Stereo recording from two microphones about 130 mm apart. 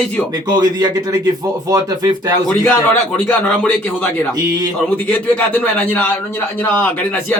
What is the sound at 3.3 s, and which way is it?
Speech, 10° left (ahead or behind).